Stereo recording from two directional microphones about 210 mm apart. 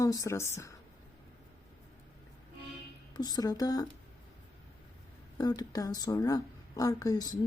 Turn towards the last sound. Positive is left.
turn(degrees=20)  # may be behind; listen again after turning